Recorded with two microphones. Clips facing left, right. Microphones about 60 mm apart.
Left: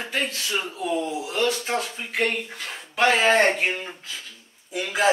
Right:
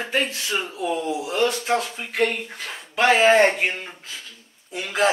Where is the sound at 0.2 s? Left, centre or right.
Centre.